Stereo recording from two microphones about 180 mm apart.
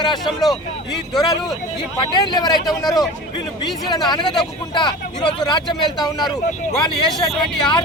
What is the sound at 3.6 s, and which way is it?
Speech, 25° left (ahead or behind).